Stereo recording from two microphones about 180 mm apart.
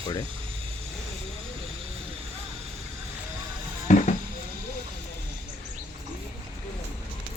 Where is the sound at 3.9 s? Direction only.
45° left (ahead or behind).